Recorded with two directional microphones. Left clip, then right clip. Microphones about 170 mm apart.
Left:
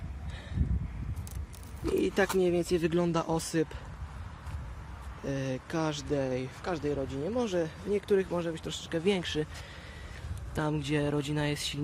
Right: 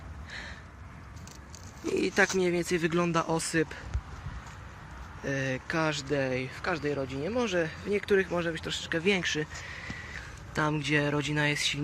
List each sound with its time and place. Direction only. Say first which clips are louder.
2.0 s speech: right 2 dB; 10° left (ahead or behind)
5.2 s speech: right 3 dB; 15° left (ahead or behind)